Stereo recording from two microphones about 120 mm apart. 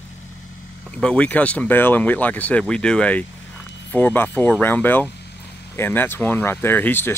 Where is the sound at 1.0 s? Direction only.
10° left (ahead or behind).